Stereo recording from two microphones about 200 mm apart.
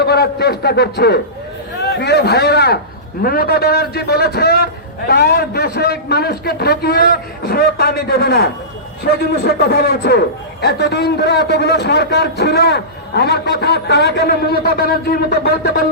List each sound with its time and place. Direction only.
0.0 s a man's voice: 55° left (ahead or behind)